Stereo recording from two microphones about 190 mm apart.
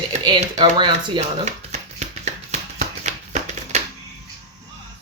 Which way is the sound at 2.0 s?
35° right (ahead or behind).